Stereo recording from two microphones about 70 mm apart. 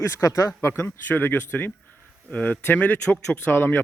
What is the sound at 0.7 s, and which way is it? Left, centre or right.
A man's voice, left.